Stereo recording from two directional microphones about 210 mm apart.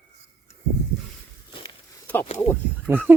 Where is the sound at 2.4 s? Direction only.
10° left (ahead or behind).